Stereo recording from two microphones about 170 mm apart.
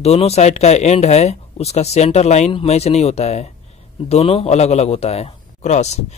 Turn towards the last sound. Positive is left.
turn(degrees=40)  # may be behind; listen again after turning